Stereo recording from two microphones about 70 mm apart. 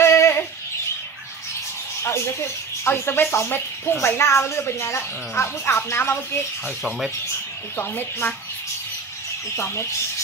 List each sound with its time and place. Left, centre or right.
0.0 s a sound: left
2.0 s speech: left
7.7 s speech: left